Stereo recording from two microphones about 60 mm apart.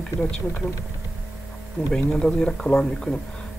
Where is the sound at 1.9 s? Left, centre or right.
Centre.